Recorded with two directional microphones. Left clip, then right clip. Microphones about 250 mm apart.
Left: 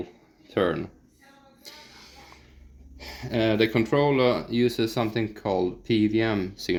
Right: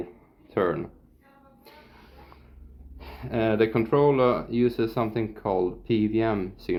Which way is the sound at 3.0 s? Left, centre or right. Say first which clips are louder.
Left 1 dB; left.